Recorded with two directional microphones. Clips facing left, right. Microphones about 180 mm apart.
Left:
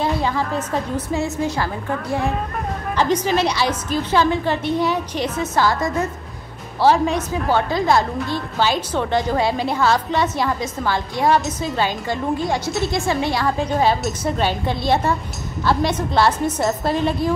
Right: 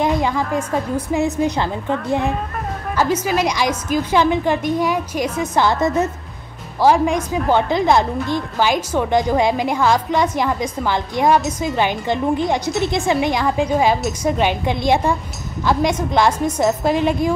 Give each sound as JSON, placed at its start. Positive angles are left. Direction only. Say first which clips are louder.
{"t": 0.0, "sound": "a woman's voice", "louder": "right 2 dB", "side_deg": -15}
{"t": 3.0, "sound": "a woman's voice", "louder": "even", "side_deg": -10}
{"t": 6.8, "sound": "a woman's voice", "louder": "right 1 dB", "side_deg": -15}